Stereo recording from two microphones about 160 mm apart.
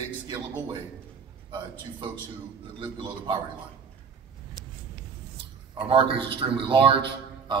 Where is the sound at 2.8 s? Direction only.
30° right (ahead or behind).